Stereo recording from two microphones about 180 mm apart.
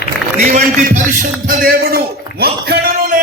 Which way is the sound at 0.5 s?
45° right (ahead or behind).